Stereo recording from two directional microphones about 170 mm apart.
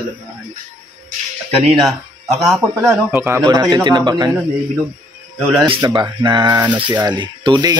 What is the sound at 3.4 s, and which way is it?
Speech, 25° right (ahead or behind).